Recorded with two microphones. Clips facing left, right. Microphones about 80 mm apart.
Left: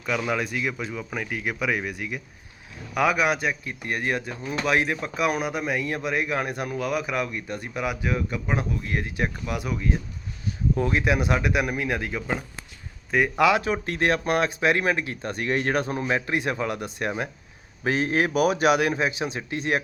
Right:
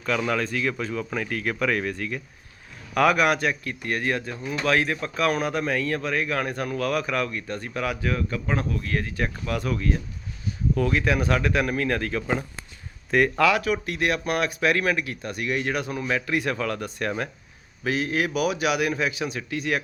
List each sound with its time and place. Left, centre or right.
0.0 s speech: centre
13.4 s speech: left
17.8 s speech: left